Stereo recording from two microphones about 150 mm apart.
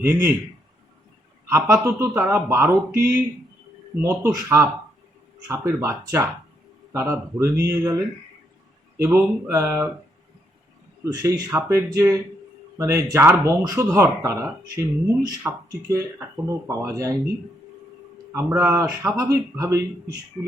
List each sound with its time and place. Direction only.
0.0 s speech: 15° right (ahead or behind)
1.5 s speech: 20° right (ahead or behind)
3.0 s speech: 70° right (ahead or behind)
4.0 s speech: 15° right (ahead or behind)
11.0 s speech: 20° right (ahead or behind)
18.3 s speech: 20° right (ahead or behind)